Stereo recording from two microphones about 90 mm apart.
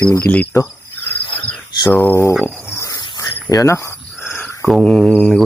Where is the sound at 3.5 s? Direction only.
35° left (ahead or behind).